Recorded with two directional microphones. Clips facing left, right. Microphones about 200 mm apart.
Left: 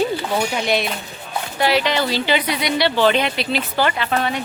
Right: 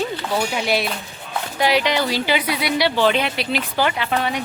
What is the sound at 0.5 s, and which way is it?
Speech, 5° right (ahead or behind).